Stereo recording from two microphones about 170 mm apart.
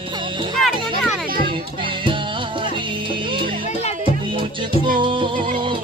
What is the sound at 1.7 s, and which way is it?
Music, 30° right (ahead or behind).